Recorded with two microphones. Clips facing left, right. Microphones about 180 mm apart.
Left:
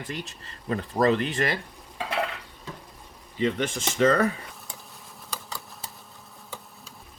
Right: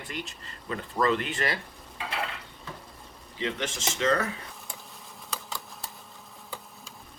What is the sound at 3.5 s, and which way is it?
Speech, 55° left (ahead or behind).